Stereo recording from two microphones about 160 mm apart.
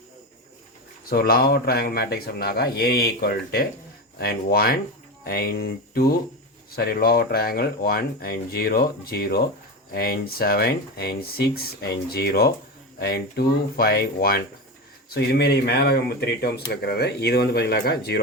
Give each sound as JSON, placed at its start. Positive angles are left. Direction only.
{"t": 1.1, "sound": "speech", "side_deg": 70}
{"t": 15.1, "sound": "speech", "side_deg": 85}